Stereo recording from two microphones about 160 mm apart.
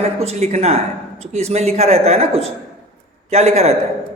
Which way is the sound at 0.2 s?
40° right (ahead or behind).